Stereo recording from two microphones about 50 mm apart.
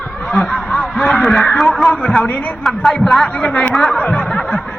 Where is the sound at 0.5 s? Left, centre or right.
Left.